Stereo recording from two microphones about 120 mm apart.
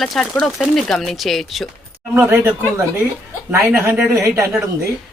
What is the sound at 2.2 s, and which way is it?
Speech, 15° right (ahead or behind).